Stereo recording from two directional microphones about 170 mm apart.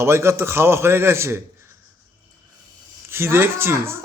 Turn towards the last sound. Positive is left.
turn(degrees=-15)  # may be behind; listen again after turning